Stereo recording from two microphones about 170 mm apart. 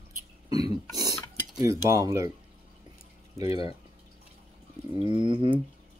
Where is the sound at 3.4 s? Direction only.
35° left (ahead or behind).